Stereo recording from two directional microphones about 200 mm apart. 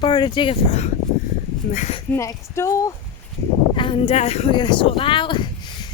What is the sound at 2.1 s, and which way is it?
Speech, 15° left (ahead or behind).